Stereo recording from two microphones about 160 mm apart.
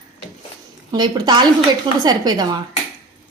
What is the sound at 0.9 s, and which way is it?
A woman's voice, 25° right (ahead or behind).